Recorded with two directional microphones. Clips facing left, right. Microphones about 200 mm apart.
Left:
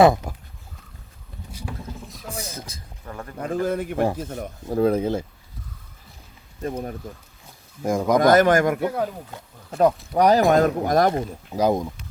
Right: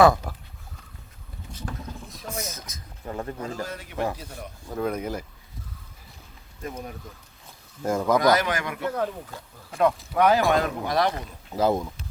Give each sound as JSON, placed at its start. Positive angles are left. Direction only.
{"t": 0.0, "sound": "speech", "side_deg": 25}
{"t": 1.5, "sound": "boat", "side_deg": 5}
{"t": 2.4, "sound": "boat", "side_deg": 30}
{"t": 3.1, "sound": "speech", "side_deg": -25}
{"t": 3.4, "sound": "a man's voice", "side_deg": 55}
{"t": 4.7, "sound": "speech", "side_deg": 30}
{"t": 6.6, "sound": "speech", "side_deg": 35}
{"t": 7.8, "sound": "speech", "side_deg": 10}
{"t": 8.2, "sound": "speech", "side_deg": 50}
{"t": 10.2, "sound": "speech", "side_deg": 40}
{"t": 11.5, "sound": "speech", "side_deg": 15}